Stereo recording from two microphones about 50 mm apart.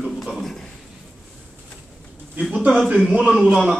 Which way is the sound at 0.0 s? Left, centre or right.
Centre.